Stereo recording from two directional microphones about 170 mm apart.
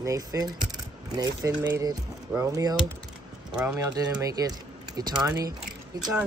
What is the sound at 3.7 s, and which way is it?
Speech, 20° right (ahead or behind).